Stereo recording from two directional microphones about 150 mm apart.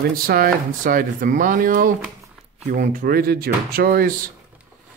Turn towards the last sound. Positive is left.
turn(degrees=-80)